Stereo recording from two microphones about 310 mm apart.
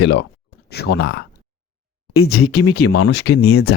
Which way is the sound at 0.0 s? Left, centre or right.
Left.